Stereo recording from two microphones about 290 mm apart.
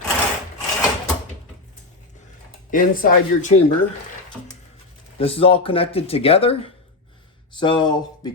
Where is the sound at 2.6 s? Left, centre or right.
Left.